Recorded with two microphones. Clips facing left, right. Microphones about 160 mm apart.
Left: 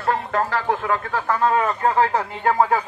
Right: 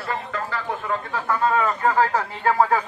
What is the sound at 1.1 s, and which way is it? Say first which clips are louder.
Speech: left 1 dB; 45° left (ahead or behind).